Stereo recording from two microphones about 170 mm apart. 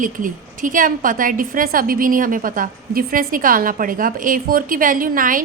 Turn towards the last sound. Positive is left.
turn(degrees=-55)  # may be behind; listen again after turning